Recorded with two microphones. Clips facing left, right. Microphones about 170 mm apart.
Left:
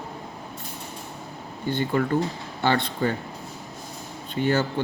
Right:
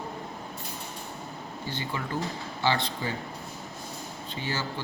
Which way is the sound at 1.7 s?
55° left (ahead or behind).